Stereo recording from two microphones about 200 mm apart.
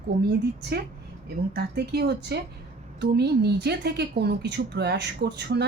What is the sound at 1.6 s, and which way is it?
Speech, 55° right (ahead or behind).